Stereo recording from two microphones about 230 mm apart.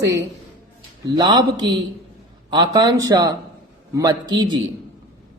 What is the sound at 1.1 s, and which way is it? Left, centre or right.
A woman's voice, centre.